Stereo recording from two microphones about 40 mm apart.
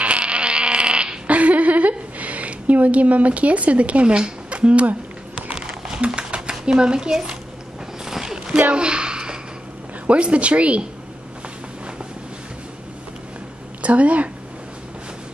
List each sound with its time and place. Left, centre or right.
0.0 s insect: right
1.3 s a sound: right
6.6 s speech: right
8.0 s a sound: centre
10.0 s speech: right
13.8 s speech: right